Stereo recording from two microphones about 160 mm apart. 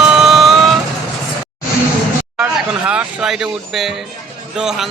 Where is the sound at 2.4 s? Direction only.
5° right (ahead or behind).